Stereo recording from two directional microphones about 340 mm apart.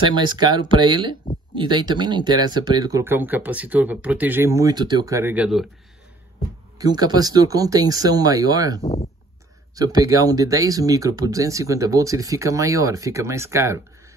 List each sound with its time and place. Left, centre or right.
0.0 s speech: centre
6.8 s speech: centre
8.8 s speech: centre
9.8 s speech: centre